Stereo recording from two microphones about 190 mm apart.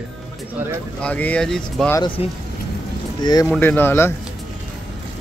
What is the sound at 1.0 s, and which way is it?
Speech, 5° left (ahead or behind).